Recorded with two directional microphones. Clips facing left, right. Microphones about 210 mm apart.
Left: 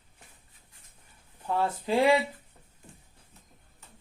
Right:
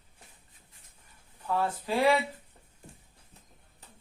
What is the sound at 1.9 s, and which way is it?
Speech, 20° left (ahead or behind).